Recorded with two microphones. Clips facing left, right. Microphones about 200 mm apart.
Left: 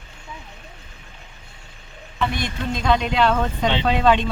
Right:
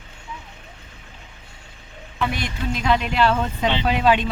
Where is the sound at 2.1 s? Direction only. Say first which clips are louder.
Left 1 dB; 5° right (ahead or behind).